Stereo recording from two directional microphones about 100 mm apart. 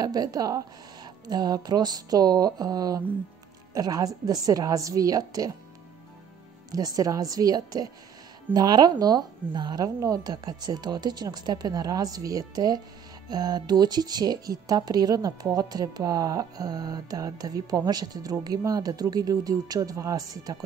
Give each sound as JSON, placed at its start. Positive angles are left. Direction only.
{"t": 0.0, "sound": "speech", "side_deg": -40}
{"t": 7.0, "sound": "speech", "side_deg": -35}